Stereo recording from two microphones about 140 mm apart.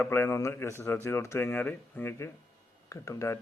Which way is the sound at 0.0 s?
15° left (ahead or behind).